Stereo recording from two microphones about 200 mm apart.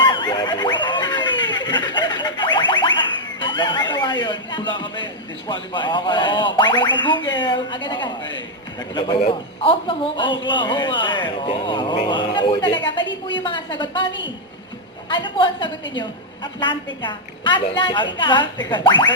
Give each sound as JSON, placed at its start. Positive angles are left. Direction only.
{"t": 0.0, "sound": "snicker", "side_deg": 25}
{"t": 3.4, "sound": "a woman's voice", "side_deg": 25}
{"t": 9.2, "sound": "a woman's voice", "side_deg": 25}
{"t": 15.1, "sound": "a woman's voice", "side_deg": 25}